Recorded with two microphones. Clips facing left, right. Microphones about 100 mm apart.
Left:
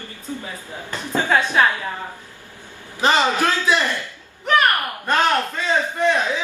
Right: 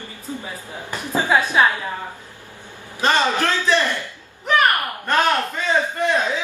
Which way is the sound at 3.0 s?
15° left (ahead or behind).